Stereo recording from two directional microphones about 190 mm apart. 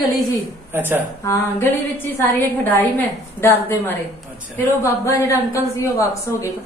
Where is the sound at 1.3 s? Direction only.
10° left (ahead or behind).